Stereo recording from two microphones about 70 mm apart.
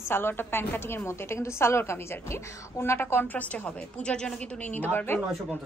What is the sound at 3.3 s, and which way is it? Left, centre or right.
A woman's voice, centre.